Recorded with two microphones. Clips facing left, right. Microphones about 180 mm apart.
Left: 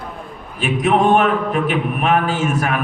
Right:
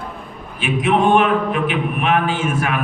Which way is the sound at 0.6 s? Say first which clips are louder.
Left 1 dB; 40° left (ahead or behind).